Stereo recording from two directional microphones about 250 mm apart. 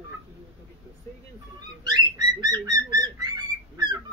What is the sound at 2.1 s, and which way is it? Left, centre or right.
Bird, centre.